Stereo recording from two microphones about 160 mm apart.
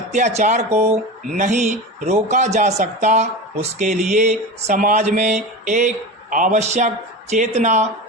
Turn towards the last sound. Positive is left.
turn(degrees=-50)  # may be behind; listen again after turning